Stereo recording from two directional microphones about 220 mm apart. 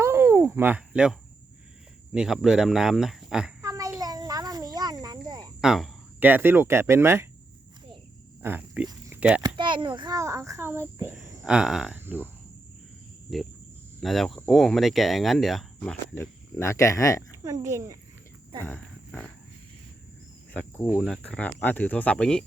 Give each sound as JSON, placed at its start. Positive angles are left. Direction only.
{"t": 0.0, "sound": "a sound", "side_deg": -10}
{"t": 2.1, "sound": "speech", "side_deg": 0}
{"t": 3.6, "sound": "snake", "side_deg": -15}
{"t": 5.5, "sound": "speech", "side_deg": 0}
{"t": 8.4, "sound": "speech", "side_deg": -10}
{"t": 8.9, "sound": "a sound", "side_deg": -10}
{"t": 9.6, "sound": "a child's voice", "side_deg": -20}
{"t": 13.3, "sound": "speech", "side_deg": 0}
{"t": 17.4, "sound": "a child's voice", "side_deg": -15}
{"t": 18.6, "sound": "speech", "side_deg": 5}
{"t": 20.5, "sound": "speech", "side_deg": 10}